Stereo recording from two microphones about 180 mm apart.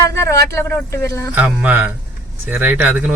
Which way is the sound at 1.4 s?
10° right (ahead or behind).